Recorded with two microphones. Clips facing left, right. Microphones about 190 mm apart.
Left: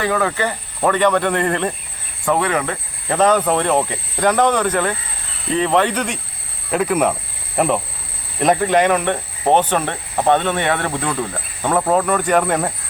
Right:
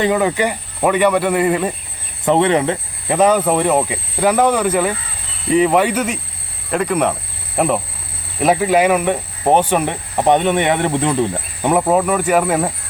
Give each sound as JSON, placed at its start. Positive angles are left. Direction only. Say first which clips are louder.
{"t": 0.0, "sound": "speech", "louder": "right 3 dB", "side_deg": -20}
{"t": 2.2, "sound": "speech", "louder": "right 5 dB", "side_deg": -25}
{"t": 3.2, "sound": "speech", "louder": "right 2 dB", "side_deg": -10}